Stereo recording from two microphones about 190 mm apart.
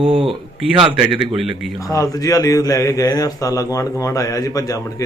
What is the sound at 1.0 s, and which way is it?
Speech, 5° right (ahead or behind).